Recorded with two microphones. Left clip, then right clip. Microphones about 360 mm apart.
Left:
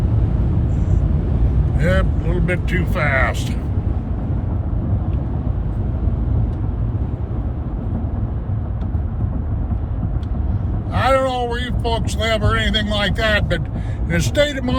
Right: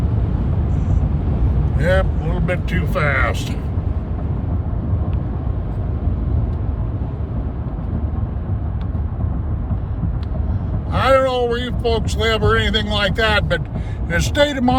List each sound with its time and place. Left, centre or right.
1.8 s speech: centre
10.9 s speech: centre